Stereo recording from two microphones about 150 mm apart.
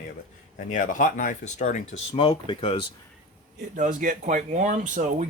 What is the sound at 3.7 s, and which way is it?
Speech, 60° right (ahead or behind).